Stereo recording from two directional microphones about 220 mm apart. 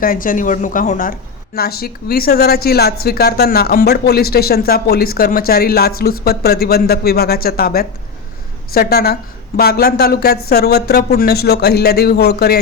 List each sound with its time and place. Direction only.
0.0 s speech: 40° left (ahead or behind)